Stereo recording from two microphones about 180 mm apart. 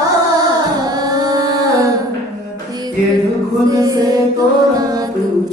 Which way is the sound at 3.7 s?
20° right (ahead or behind).